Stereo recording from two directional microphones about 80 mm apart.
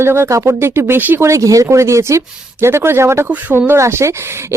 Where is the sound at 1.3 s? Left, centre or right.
Right.